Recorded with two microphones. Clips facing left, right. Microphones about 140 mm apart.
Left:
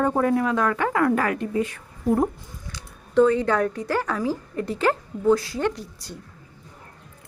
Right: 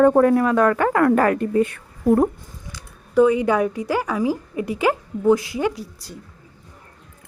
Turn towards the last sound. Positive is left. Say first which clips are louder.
# right 2 dB
turn(degrees=-5)  # may be behind; listen again after turning